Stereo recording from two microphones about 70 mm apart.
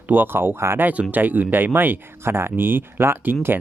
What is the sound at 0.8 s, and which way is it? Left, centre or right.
Speech, right.